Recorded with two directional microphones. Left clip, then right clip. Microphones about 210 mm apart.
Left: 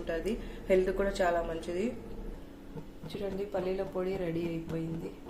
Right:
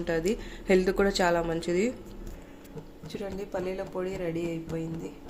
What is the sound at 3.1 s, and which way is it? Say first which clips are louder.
Speech: right 1 dB; 15° right (ahead or behind).